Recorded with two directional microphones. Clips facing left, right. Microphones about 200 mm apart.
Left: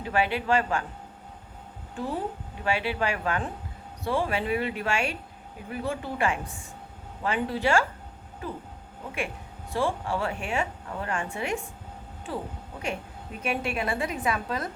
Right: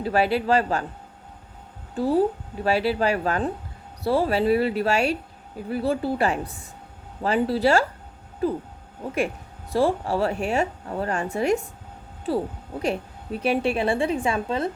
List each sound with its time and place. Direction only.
0.0 s a woman's voice: 35° right (ahead or behind)
2.0 s a woman's voice: 35° right (ahead or behind)
9.7 s a woman's voice: 35° right (ahead or behind)
12.8 s a woman's voice: 35° right (ahead or behind)